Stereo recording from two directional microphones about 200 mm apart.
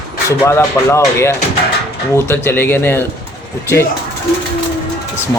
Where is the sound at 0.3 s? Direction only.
15° left (ahead or behind).